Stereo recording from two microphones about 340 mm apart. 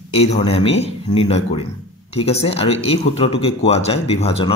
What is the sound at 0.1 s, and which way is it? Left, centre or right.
Speech, centre.